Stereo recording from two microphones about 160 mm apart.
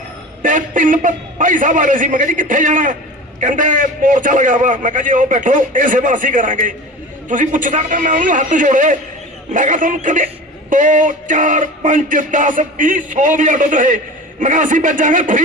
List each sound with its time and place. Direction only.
0.4 s a man's voice: 55° right (ahead or behind)
9.5 s music: 55° right (ahead or behind)